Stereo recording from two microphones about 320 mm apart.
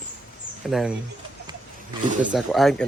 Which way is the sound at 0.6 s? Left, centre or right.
Centre.